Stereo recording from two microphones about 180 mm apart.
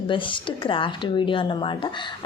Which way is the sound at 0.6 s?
30° left (ahead or behind).